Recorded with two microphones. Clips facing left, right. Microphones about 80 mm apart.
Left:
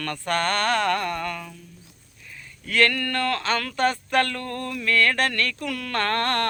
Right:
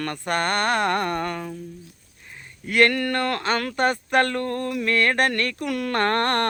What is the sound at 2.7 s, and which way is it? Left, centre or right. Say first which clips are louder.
Speech: right 3 dB; right.